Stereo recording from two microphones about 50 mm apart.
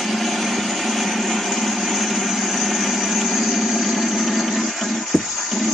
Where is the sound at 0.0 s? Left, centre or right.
Centre.